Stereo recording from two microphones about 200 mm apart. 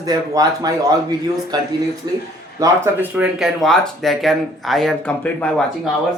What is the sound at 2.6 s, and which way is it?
Speech, 10° right (ahead or behind).